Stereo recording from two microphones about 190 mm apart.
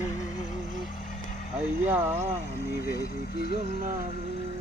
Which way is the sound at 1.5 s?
10° right (ahead or behind).